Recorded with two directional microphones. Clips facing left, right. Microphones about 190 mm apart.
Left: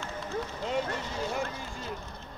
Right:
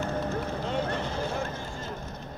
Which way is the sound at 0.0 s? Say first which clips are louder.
Right 5 dB; 60° right (ahead or behind).